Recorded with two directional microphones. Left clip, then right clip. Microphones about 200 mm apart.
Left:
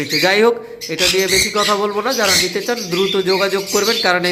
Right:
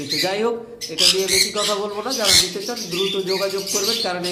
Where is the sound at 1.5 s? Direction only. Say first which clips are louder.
Left 6 dB; 35° left (ahead or behind).